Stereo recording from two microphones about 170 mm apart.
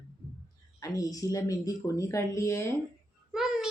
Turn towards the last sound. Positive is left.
turn(degrees=-5)  # may be behind; listen again after turning